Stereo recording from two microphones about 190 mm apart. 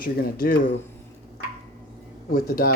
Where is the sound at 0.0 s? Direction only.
50° left (ahead or behind).